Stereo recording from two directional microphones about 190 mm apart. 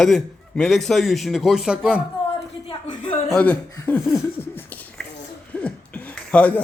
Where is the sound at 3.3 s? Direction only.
10° left (ahead or behind).